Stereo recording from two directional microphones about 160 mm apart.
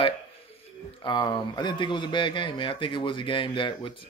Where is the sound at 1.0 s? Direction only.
30° left (ahead or behind).